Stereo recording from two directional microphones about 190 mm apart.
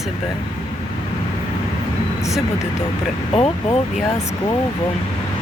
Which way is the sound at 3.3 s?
30° left (ahead or behind).